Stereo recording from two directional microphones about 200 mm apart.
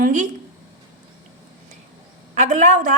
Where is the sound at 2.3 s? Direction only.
35° right (ahead or behind).